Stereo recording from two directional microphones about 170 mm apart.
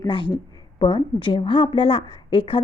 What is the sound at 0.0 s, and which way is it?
A woman's voice, 25° left (ahead or behind).